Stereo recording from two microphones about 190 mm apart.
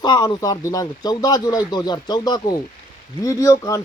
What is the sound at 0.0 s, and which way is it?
Speech, 20° left (ahead or behind).